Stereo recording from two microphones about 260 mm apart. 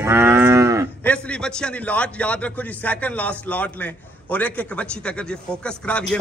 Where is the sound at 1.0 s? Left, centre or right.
Centre.